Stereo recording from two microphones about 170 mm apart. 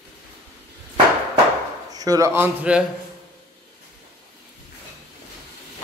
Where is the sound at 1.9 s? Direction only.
20° right (ahead or behind).